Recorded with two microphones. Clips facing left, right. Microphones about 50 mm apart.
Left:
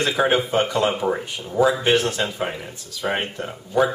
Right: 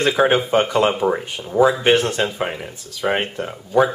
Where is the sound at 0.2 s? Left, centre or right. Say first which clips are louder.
Right 2 dB; centre.